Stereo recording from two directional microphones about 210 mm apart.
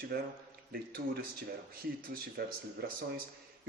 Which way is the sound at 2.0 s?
45° right (ahead or behind).